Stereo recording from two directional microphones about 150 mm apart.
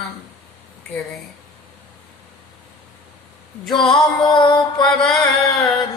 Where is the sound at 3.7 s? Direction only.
30° left (ahead or behind).